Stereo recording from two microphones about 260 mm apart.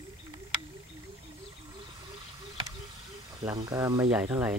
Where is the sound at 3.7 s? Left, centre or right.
Centre.